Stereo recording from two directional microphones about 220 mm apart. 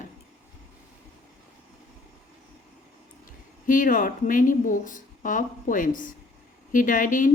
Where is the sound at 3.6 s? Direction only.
35° left (ahead or behind).